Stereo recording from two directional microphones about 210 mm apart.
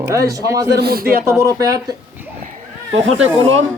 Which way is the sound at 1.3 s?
15° right (ahead or behind).